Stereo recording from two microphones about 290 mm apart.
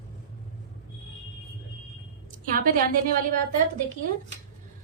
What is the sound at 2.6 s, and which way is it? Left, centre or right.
Speech, right.